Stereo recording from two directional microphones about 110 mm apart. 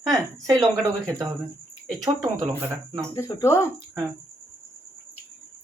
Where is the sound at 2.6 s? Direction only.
25° right (ahead or behind).